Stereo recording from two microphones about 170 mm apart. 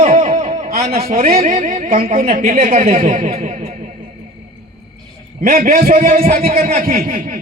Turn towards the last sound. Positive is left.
turn(degrees=-50)  # may be behind; listen again after turning